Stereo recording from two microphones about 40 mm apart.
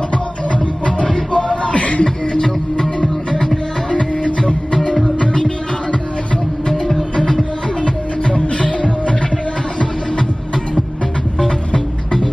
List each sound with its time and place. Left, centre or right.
0.5 s music: left
2.3 s music: centre
6.7 s music: centre
7.8 s music: left
11.3 s music: centre